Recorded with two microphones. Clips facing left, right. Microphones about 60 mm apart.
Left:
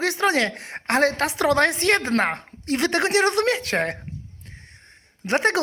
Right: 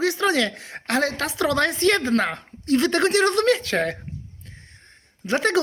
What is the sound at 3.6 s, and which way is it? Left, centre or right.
Speech, left.